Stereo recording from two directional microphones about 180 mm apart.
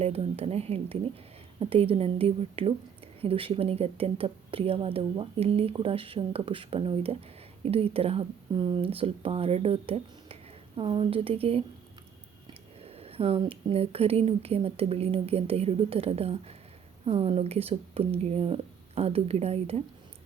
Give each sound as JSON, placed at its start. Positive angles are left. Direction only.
{"t": 0.0, "sound": "speech", "side_deg": -35}
{"t": 12.8, "sound": "speech", "side_deg": -35}